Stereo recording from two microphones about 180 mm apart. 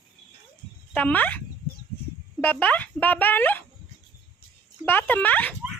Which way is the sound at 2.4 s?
10° left (ahead or behind).